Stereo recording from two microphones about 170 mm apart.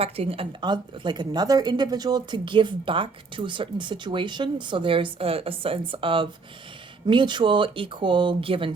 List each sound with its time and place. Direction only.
0.0 s a woman's voice: 35° right (ahead or behind)